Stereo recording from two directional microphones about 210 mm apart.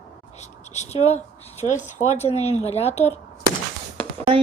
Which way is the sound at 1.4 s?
30° left (ahead or behind).